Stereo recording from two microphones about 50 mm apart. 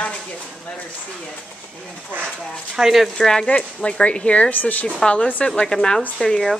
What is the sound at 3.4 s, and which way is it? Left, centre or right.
A woman's voice, left.